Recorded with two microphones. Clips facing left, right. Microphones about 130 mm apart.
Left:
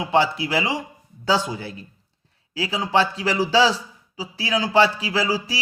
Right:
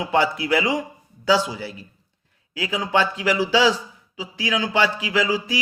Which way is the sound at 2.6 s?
30° left (ahead or behind).